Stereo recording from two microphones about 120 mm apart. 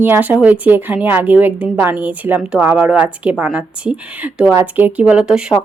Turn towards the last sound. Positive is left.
turn(degrees=-5)  # may be behind; listen again after turning